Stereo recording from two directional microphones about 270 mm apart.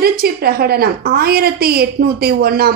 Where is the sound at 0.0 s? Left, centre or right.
Right.